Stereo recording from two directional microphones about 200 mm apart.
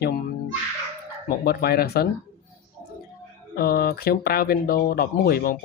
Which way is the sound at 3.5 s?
50° left (ahead or behind).